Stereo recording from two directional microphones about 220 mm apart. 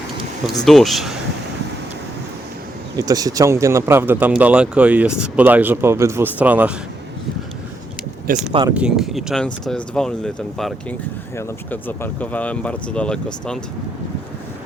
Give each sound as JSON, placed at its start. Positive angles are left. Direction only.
{"t": 0.6, "sound": "speech", "side_deg": 0}
{"t": 3.0, "sound": "speech", "side_deg": -15}
{"t": 8.3, "sound": "speech", "side_deg": -40}
{"t": 8.7, "sound": "speech", "side_deg": -5}